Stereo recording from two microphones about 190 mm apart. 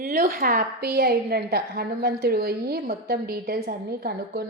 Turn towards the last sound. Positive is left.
turn(degrees=-50)  # may be behind; listen again after turning